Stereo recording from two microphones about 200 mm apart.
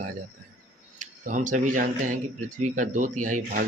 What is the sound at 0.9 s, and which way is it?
Speech, 40° right (ahead or behind).